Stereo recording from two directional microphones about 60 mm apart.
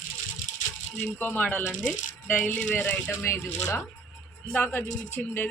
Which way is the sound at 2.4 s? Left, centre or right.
Left.